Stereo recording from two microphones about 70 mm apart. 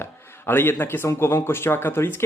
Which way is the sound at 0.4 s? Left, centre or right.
Left.